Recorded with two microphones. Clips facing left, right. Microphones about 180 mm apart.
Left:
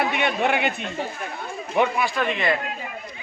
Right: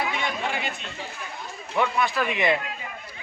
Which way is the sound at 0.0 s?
65° left (ahead or behind).